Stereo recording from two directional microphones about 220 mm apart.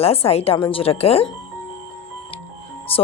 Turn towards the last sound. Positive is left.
turn(degrees=25)  # may be behind; listen again after turning